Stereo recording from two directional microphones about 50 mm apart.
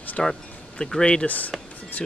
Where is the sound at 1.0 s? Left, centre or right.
Left.